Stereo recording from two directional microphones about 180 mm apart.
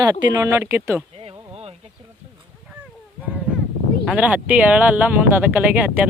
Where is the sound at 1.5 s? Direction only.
35° right (ahead or behind).